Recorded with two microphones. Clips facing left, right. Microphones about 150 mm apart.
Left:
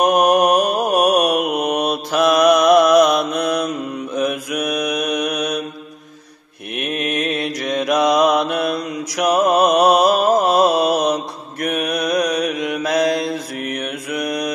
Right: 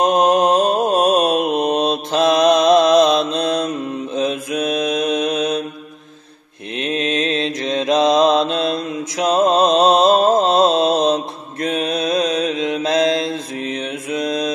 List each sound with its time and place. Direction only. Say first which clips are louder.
0.4 s mantra: right 1 dB; 25° right (ahead or behind)
7.0 s mantra: right 2 dB; 20° right (ahead or behind)